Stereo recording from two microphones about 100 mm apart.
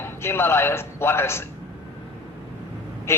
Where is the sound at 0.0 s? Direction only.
25° left (ahead or behind).